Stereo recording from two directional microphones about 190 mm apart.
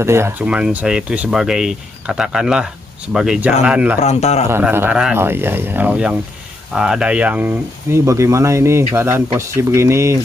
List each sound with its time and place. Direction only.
0.0 s speech: 15° right (ahead or behind)
4.0 s a man's voice: 35° left (ahead or behind)
4.5 s speech: 10° right (ahead or behind)